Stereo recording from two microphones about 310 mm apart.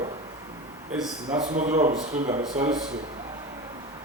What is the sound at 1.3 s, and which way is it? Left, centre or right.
Speech, right.